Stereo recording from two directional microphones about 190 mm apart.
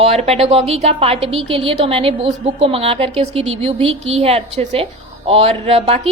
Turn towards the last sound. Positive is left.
turn(degrees=-30)  # may be behind; listen again after turning